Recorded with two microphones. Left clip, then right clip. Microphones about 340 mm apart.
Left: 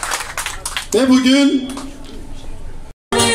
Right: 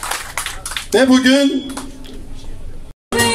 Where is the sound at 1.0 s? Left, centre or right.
Right.